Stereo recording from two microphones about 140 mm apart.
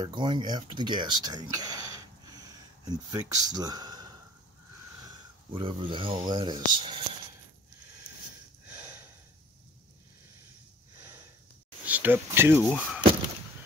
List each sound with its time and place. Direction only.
0.0 s speech: 30° right (ahead or behind)
5.5 s speech: 35° right (ahead or behind)
8.6 s a sound: 10° right (ahead or behind)
11.8 s speech: 10° right (ahead or behind)